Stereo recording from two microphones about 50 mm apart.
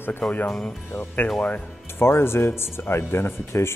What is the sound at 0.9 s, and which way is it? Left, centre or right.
Speech, left.